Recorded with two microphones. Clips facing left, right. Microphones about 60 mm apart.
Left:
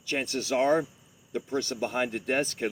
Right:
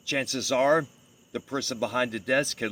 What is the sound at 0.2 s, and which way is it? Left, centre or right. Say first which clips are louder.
A man's voice: right 2 dB; right.